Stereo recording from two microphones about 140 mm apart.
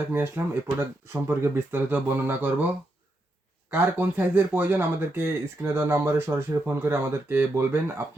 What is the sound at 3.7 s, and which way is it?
Speech, 15° right (ahead or behind).